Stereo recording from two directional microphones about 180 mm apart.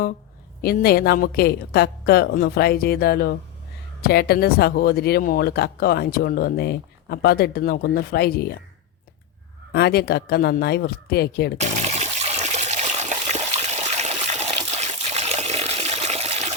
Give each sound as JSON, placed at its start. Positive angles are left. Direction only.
{"t": 0.6, "sound": "speech", "side_deg": 55}
{"t": 9.7, "sound": "speech", "side_deg": 65}
{"t": 11.9, "sound": "water", "side_deg": -35}